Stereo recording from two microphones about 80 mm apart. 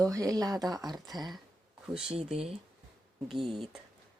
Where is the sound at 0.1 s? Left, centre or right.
Right.